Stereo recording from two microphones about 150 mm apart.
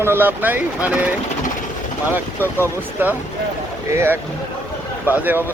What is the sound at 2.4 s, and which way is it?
Speech, 15° left (ahead or behind).